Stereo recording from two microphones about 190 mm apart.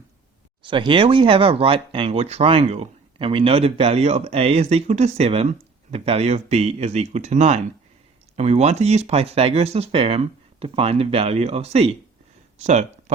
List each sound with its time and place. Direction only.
0.6 s speech: 25° right (ahead or behind)